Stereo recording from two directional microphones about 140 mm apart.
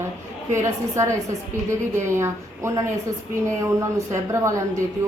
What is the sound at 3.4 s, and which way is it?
A woman's voice, 20° right (ahead or behind).